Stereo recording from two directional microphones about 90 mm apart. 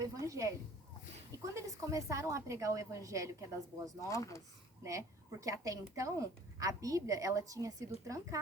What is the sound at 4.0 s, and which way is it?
Speech, 35° left (ahead or behind).